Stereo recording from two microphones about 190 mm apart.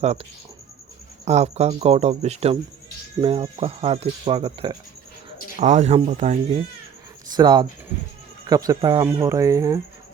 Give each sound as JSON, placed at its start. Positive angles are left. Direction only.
{"t": 0.0, "sound": "speech", "side_deg": -35}
{"t": 5.5, "sound": "speech", "side_deg": -40}
{"t": 7.3, "sound": "speech", "side_deg": -25}